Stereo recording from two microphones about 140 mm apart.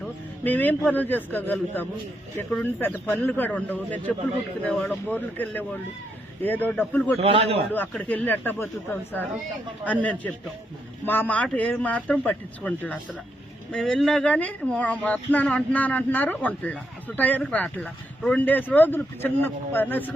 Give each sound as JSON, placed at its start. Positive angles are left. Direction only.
{"t": 0.4, "sound": "speech", "side_deg": 10}
{"t": 7.2, "sound": "a man's voice", "side_deg": -45}
{"t": 7.7, "sound": "speech", "side_deg": 10}